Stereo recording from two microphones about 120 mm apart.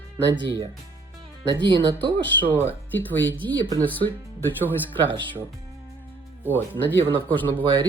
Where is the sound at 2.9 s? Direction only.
15° left (ahead or behind).